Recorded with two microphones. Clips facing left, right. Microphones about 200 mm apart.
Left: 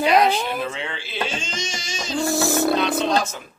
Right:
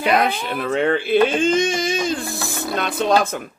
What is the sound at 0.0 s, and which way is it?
Speech, 55° right (ahead or behind).